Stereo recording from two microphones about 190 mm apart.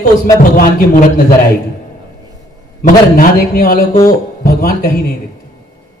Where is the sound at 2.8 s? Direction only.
50° left (ahead or behind).